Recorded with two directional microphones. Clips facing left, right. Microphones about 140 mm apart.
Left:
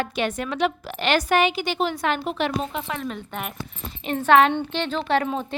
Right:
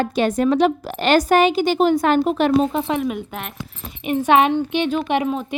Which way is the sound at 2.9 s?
10° right (ahead or behind).